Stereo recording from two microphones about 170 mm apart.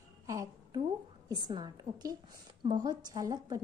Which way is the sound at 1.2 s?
25° right (ahead or behind).